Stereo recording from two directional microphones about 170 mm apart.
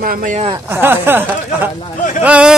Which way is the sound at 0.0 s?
45° right (ahead or behind).